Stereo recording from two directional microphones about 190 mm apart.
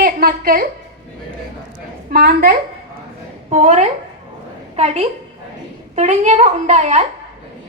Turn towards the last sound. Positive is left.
turn(degrees=-35)  # may be behind; listen again after turning